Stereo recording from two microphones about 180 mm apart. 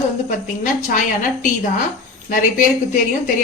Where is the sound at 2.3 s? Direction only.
45° left (ahead or behind).